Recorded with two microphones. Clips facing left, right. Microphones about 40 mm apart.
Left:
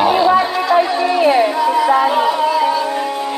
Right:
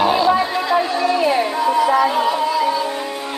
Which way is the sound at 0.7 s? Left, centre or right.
Left.